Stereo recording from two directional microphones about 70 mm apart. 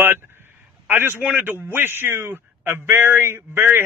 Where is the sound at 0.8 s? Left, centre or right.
Right.